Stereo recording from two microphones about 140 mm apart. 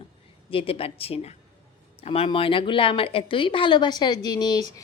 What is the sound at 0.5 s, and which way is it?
Speech, 40° left (ahead or behind).